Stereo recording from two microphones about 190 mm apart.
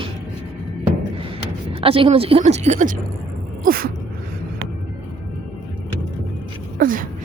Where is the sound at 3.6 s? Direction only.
50° right (ahead or behind).